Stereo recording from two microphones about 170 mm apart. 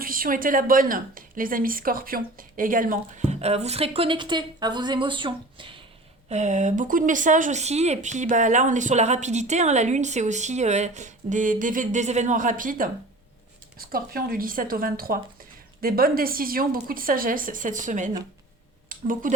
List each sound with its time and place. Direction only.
0.0 s speech: 55° right (ahead or behind); by 5.8 s 30° right (ahead or behind)
6.2 s a woman's voice: 40° right (ahead or behind)
18.9 s a sound: 55° right (ahead or behind)